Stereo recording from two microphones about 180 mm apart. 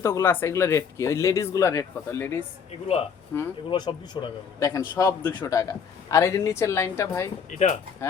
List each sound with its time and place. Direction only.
0.0 s speech: 15° left (ahead or behind)
7.5 s speech: 40° left (ahead or behind)